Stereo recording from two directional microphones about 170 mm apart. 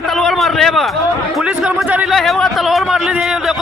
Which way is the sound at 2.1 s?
Centre (ahead or behind).